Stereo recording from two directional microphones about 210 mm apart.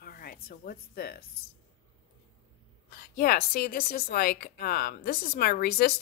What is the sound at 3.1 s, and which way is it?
Speech, 45° left (ahead or behind).